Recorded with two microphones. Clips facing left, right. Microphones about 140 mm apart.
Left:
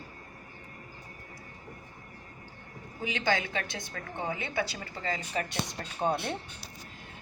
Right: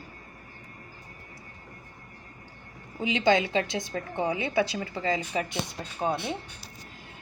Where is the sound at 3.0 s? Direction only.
20° right (ahead or behind).